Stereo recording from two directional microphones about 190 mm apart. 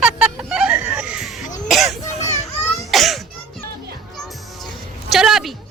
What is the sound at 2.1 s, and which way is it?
Children playing, 35° left (ahead or behind).